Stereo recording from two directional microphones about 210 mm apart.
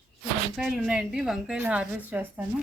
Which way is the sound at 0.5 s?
5° right (ahead or behind).